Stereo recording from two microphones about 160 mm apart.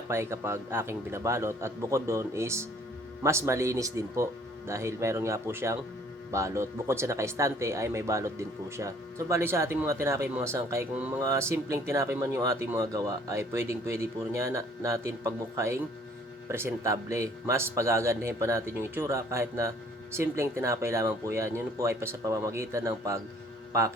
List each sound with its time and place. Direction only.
0.1 s a man's voice: 15° right (ahead or behind)